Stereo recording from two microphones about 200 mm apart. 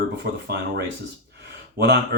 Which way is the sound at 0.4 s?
55° right (ahead or behind).